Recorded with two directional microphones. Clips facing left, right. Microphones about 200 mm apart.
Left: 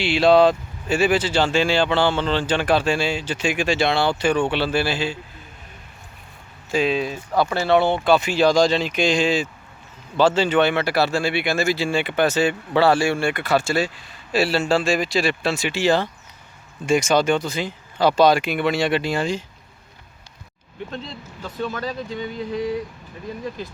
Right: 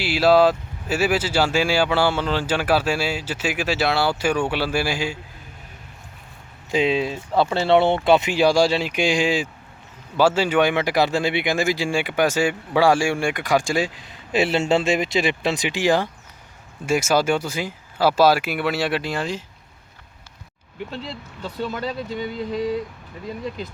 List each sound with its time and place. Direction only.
0.0 s speech: 5° right (ahead or behind)
6.7 s speech: 20° right (ahead or behind); by 19.5 s centre (ahead or behind)
21.4 s speech: 25° right (ahead or behind)